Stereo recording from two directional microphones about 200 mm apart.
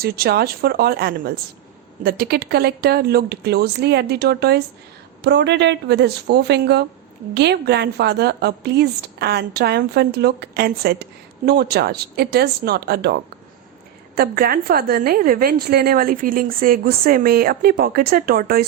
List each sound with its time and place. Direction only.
0.0 s a woman's voice: 50° right (ahead or behind)
14.2 s a woman's voice: 45° right (ahead or behind)